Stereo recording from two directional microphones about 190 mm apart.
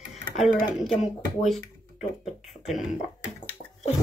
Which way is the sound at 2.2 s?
Centre (ahead or behind).